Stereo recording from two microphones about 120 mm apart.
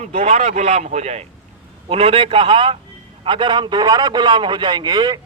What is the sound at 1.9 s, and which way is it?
A man's voice, 55° right (ahead or behind).